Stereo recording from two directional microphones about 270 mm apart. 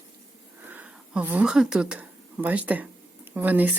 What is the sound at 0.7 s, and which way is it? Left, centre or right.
Speech, centre.